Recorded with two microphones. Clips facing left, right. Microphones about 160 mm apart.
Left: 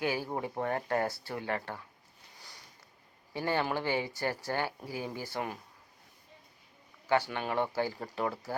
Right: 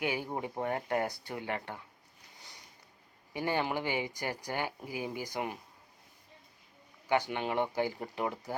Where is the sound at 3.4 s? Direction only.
15° right (ahead or behind).